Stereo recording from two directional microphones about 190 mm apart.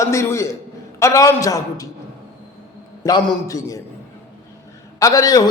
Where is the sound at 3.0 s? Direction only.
20° left (ahead or behind).